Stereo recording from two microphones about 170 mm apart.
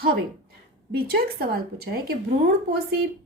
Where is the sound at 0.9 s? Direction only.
65° right (ahead or behind).